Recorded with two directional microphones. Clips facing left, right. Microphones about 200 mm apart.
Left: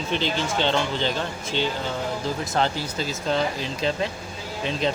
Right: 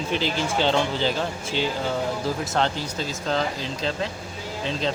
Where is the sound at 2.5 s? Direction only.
5° left (ahead or behind).